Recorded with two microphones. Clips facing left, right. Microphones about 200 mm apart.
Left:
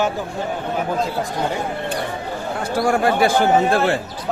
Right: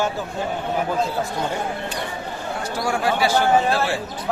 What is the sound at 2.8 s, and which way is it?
Speech, 55° left (ahead or behind).